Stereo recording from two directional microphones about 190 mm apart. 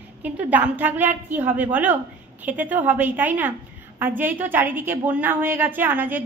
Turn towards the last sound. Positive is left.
turn(degrees=-10)  # may be behind; listen again after turning